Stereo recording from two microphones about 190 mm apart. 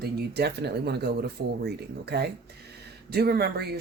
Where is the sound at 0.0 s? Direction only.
60° right (ahead or behind).